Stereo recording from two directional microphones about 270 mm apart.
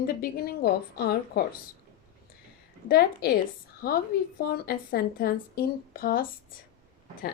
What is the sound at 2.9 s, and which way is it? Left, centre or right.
Speech, left.